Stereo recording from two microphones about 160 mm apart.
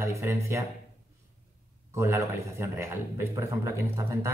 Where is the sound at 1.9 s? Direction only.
15° right (ahead or behind).